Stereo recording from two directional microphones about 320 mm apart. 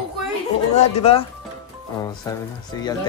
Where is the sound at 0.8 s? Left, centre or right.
Centre.